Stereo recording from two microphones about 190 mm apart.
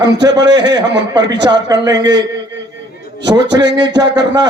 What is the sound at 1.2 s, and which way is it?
Speech, 65° right (ahead or behind).